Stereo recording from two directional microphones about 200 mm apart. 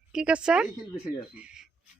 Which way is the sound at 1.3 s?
5° right (ahead or behind).